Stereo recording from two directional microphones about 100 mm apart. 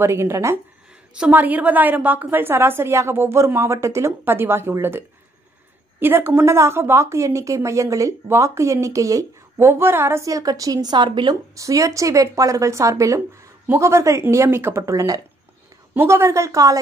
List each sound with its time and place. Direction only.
0.0 s a woman's voice: 25° right (ahead or behind)
1.1 s a woman's voice: 15° right (ahead or behind); by 11.3 s 50° right (ahead or behind)
11.5 s speech: 35° right (ahead or behind)
15.9 s speech: 25° right (ahead or behind)